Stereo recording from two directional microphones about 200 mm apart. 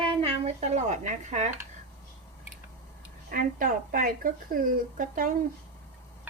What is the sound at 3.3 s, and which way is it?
A woman's voice, 45° right (ahead or behind).